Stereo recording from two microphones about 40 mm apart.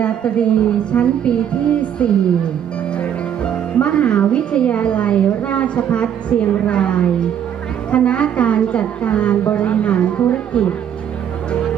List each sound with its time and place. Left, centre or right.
0.0 s speech: left